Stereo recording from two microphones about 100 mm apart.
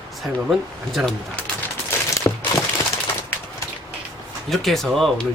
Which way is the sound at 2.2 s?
30° left (ahead or behind).